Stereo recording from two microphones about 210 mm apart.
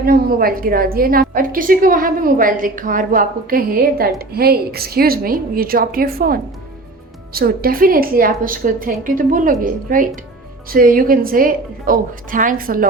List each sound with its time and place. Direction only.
0.0 s a woman's voice: 45° right (ahead or behind)